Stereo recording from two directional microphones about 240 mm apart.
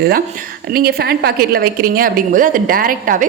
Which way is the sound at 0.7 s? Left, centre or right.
Right.